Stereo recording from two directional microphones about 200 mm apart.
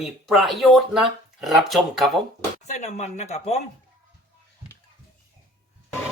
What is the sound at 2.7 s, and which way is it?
Speech, 35° left (ahead or behind).